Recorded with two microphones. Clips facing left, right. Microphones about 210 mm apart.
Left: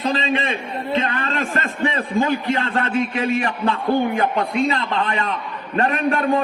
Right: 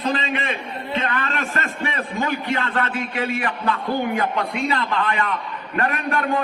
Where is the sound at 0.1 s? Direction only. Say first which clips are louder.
Left 2 dB; 25° left (ahead or behind).